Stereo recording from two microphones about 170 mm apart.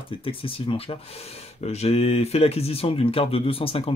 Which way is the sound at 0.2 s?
30° left (ahead or behind).